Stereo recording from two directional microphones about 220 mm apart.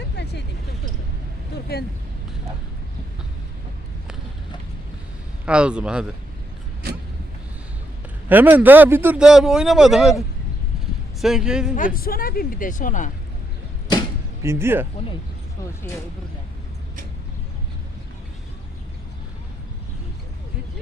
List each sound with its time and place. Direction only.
0.2 s a sound: 50° left (ahead or behind)
1.5 s vehicle: 45° left (ahead or behind)
5.5 s a man's voice: 5° right (ahead or behind)
8.3 s a man's voice: 10° right (ahead or behind)
11.9 s speech: 40° left (ahead or behind)
14.4 s speech: 10° right (ahead or behind)